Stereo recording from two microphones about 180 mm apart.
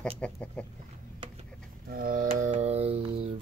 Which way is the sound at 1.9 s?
50° right (ahead or behind).